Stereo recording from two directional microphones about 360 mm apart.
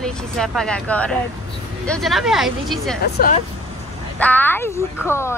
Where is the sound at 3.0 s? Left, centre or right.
Left.